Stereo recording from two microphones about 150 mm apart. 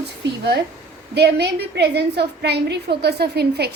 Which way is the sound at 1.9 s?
90° right.